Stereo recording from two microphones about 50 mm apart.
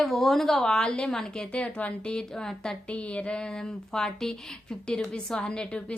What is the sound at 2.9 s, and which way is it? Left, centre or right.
A woman's voice, left.